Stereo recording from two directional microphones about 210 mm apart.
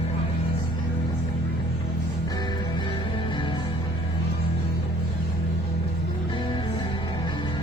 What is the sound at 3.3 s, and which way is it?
Music, 25° left (ahead or behind).